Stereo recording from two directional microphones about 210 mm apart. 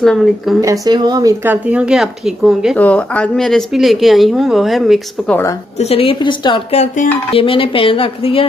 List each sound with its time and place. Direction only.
0.0 s speech: centre (ahead or behind)
0.6 s speech: 15° right (ahead or behind); by 5.4 s centre (ahead or behind)
5.8 s speech: 25° left (ahead or behind)